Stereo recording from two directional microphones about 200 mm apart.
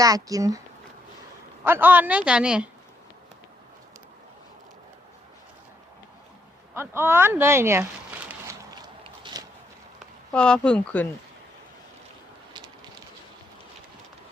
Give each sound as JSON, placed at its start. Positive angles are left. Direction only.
{"t": 0.0, "sound": "a woman's voice", "side_deg": -15}
{"t": 1.6, "sound": "a woman's voice", "side_deg": -10}
{"t": 6.7, "sound": "speech", "side_deg": -10}
{"t": 8.7, "sound": "a sound", "side_deg": -20}
{"t": 10.3, "sound": "speech", "side_deg": 5}